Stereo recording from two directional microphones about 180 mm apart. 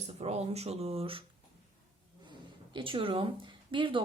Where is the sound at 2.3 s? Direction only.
25° right (ahead or behind).